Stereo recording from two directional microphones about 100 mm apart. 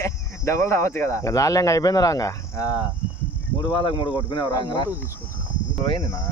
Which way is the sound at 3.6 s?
50° left (ahead or behind).